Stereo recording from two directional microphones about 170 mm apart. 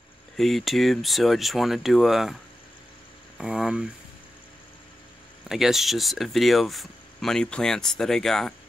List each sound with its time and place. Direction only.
0.4 s speech: centre (ahead or behind)
3.3 s speech: 5° right (ahead or behind)
5.5 s speech: centre (ahead or behind)